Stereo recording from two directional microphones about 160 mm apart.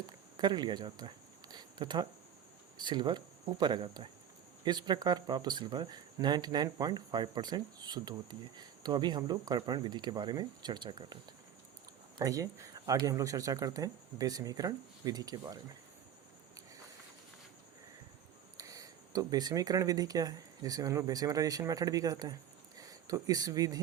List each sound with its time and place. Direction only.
0.3 s speech: 25° right (ahead or behind)
12.2 s speech: 20° right (ahead or behind)
18.5 s speech: 20° right (ahead or behind)